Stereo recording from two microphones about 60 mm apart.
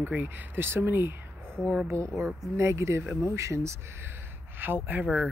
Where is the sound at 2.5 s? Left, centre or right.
Right.